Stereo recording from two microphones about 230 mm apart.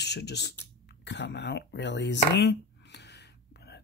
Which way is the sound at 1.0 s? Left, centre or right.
Left.